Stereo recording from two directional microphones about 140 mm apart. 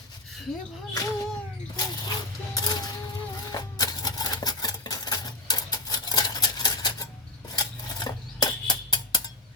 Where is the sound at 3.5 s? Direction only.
25° left (ahead or behind).